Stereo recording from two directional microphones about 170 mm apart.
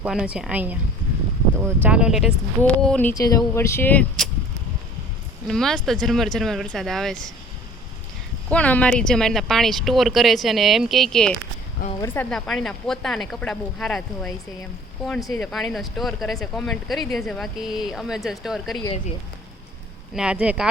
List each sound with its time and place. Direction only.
0.0 s speech: 5° right (ahead or behind)
2.6 s speech: 10° left (ahead or behind)
3.2 s speech: 20° left (ahead or behind)
5.5 s speech: centre (ahead or behind)
8.4 s speech: 10° left (ahead or behind)
20.1 s speech: 5° right (ahead or behind)